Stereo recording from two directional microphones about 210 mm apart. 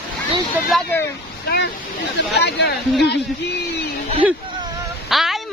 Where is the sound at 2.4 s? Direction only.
50° left (ahead or behind).